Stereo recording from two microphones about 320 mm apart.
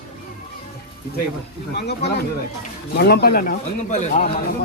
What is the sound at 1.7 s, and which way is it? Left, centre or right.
Speech, left.